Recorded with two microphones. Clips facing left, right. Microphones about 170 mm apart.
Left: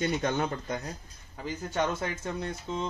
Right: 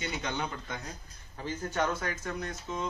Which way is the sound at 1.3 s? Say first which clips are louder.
Left 1 dB; 15° left (ahead or behind).